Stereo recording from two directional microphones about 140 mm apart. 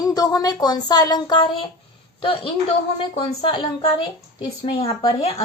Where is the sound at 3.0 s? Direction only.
35° left (ahead or behind).